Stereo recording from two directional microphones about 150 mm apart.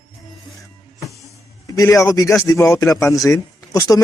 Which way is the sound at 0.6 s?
20° left (ahead or behind).